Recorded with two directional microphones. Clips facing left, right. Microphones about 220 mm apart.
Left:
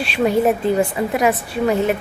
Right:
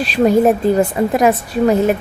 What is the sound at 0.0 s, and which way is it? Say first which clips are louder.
Speech: right 4 dB; 40° right (ahead or behind).